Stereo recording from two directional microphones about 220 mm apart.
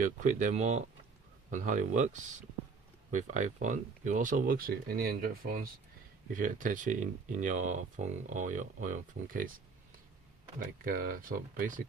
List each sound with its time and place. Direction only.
0.0 s speech: 35° right (ahead or behind)
3.1 s speech: 35° right (ahead or behind)
10.6 s speech: 40° right (ahead or behind)